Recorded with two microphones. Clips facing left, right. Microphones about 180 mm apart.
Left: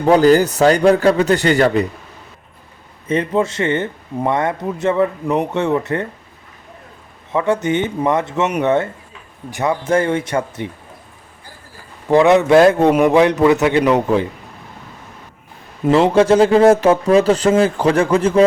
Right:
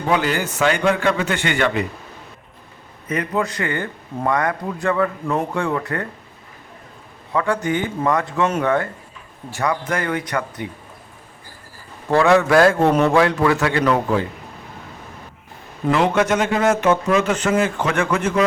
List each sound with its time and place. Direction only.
0.0 s speech: 40° left (ahead or behind)
3.1 s speech: 25° left (ahead or behind)
7.3 s speech: 20° left (ahead or behind)
12.1 s speech: 20° left (ahead or behind)
15.9 s speech: 30° left (ahead or behind)